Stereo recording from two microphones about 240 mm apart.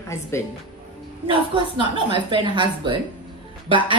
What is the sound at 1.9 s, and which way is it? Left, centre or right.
A woman's voice, centre.